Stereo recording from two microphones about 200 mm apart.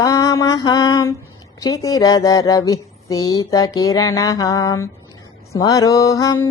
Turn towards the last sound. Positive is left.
turn(degrees=20)  # may be behind; listen again after turning